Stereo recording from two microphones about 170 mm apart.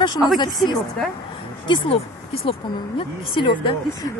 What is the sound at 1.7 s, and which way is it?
Speech, 35° left (ahead or behind).